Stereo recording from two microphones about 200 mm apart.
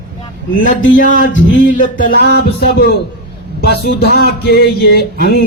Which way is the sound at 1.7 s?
40° left (ahead or behind).